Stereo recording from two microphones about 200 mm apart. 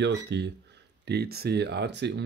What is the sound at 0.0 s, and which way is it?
Speech, 60° right (ahead or behind).